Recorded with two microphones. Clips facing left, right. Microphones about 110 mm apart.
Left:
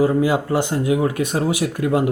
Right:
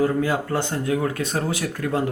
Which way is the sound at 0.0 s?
15° left (ahead or behind).